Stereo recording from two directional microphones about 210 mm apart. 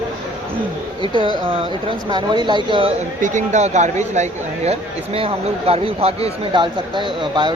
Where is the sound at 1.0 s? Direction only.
25° right (ahead or behind).